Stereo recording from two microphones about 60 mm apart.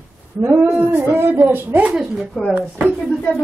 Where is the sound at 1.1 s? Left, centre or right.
Right.